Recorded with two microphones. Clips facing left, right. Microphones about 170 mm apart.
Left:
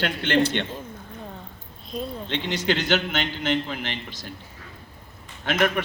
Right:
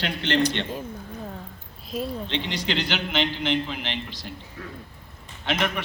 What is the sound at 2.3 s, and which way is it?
A man's voice, 50° left (ahead or behind).